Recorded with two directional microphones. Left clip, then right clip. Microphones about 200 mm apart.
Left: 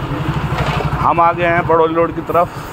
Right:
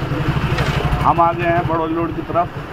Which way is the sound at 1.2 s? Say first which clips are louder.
Left 3 dB; 60° left (ahead or behind).